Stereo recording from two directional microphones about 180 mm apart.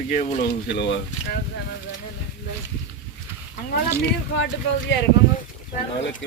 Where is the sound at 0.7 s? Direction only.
75° left (ahead or behind).